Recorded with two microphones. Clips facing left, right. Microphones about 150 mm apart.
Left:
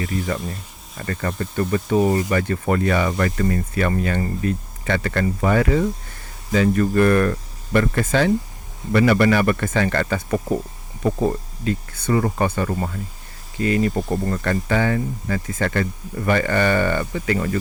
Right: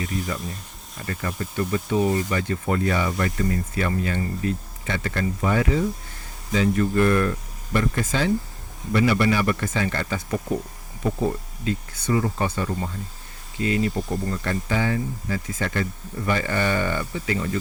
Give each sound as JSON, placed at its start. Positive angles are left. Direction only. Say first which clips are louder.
{"t": 0.0, "sound": "speech", "louder": "left 3 dB", "side_deg": 0}
{"t": 1.0, "sound": "speech", "louder": "left 4 dB", "side_deg": 60}
{"t": 11.6, "sound": "speech", "louder": "left 3 dB", "side_deg": 55}